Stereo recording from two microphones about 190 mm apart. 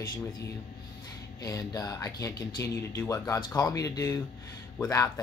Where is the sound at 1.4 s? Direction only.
20° left (ahead or behind).